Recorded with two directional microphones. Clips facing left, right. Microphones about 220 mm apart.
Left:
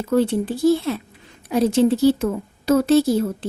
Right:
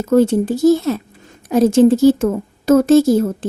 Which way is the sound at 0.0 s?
45° right (ahead or behind).